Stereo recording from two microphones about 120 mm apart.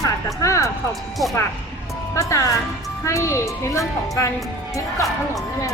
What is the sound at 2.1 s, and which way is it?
Speech, 30° left (ahead or behind).